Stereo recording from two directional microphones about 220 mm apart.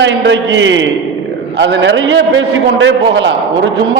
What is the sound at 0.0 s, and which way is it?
A man's voice, 55° right (ahead or behind).